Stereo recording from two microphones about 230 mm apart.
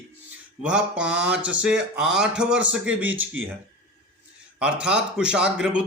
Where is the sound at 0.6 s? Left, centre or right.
Centre.